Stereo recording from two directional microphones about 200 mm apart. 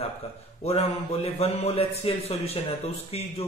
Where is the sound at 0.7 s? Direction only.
30° left (ahead or behind).